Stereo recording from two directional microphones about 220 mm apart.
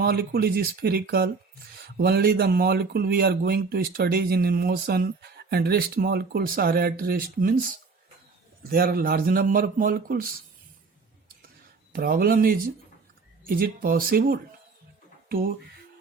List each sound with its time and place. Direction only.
0.0 s speech: 45° right (ahead or behind)
11.9 s speech: 40° right (ahead or behind)